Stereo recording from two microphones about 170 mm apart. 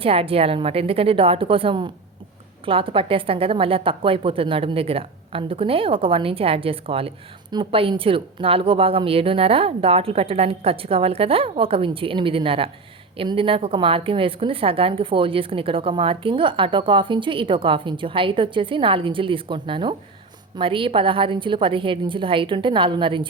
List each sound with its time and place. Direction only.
0.0 s a woman's voice: 35° right (ahead or behind)